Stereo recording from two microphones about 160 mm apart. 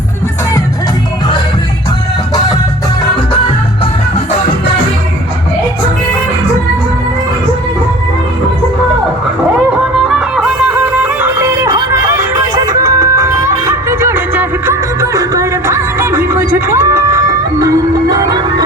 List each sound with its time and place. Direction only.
10.1 s music: 5° right (ahead or behind); by 18.6 s 25° right (ahead or behind)